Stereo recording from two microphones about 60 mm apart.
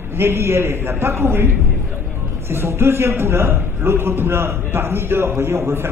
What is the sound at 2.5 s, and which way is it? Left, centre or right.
A man's voice, right.